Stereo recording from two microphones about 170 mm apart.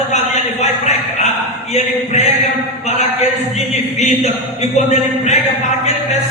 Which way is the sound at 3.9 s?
40° left (ahead or behind).